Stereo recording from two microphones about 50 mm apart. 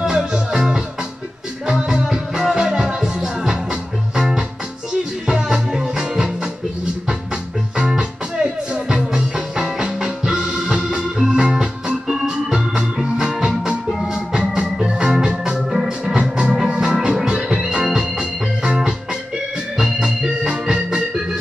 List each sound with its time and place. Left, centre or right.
0.0 s music: centre
7.7 s music: centre
14.1 s organ: centre
16.2 s music: centre
19.8 s organ: centre